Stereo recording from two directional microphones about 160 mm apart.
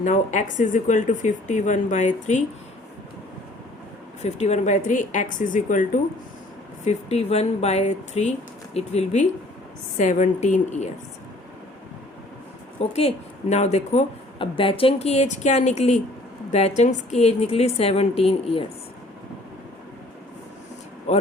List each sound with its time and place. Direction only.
0.0 s speech: 50° left (ahead or behind)
4.2 s speech: 45° left (ahead or behind)
6.8 s speech: 40° left (ahead or behind)
12.8 s a woman's voice: 40° left (ahead or behind)
21.1 s speech: 45° left (ahead or behind)